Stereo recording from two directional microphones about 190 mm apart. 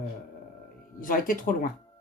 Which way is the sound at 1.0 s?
45° left (ahead or behind).